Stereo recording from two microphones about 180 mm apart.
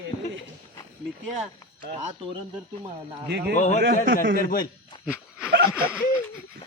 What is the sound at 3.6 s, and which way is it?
Speech, 40° left (ahead or behind).